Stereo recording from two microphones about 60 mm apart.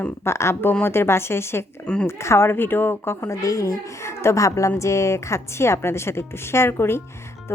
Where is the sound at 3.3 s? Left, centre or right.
Left.